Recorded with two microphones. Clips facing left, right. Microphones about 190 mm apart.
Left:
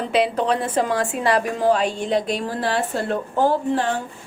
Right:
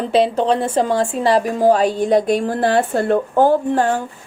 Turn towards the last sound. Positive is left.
turn(degrees=-45)  # may be behind; listen again after turning